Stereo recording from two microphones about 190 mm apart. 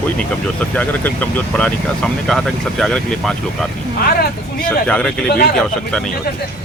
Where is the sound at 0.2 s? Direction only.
10° left (ahead or behind).